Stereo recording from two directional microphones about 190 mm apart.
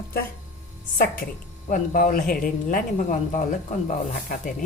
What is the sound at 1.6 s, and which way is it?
Speech, 45° left (ahead or behind).